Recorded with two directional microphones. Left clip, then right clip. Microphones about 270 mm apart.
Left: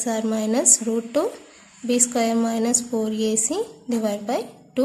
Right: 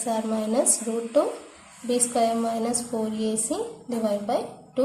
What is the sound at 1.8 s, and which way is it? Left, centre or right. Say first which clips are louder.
A woman's voice: left 1 dB; left.